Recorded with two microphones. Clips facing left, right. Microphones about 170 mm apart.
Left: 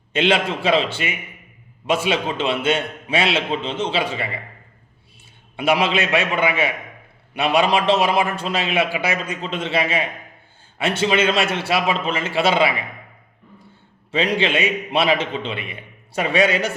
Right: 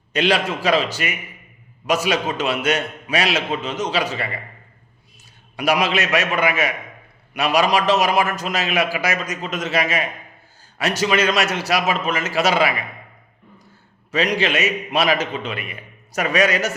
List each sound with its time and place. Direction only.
0.1 s a man's voice: 25° left (ahead or behind)
5.5 s a man's voice: 25° left (ahead or behind)
14.1 s a man's voice: 30° left (ahead or behind)